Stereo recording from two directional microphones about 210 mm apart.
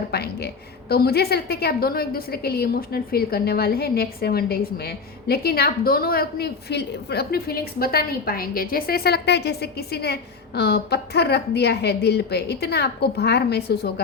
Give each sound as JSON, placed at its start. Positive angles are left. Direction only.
{"t": 0.1, "sound": "a woman's voice", "side_deg": 50}